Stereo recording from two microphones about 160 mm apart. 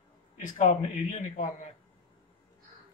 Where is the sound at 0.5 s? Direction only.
50° left (ahead or behind).